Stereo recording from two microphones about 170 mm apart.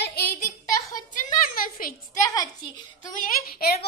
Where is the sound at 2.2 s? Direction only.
20° left (ahead or behind).